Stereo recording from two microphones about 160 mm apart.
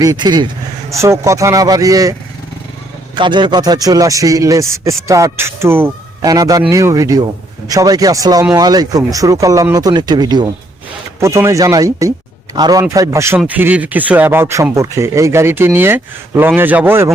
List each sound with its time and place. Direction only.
0.0 s a man's voice: 25° right (ahead or behind)
3.2 s a man's voice: 30° right (ahead or behind); by 17.1 s 15° right (ahead or behind)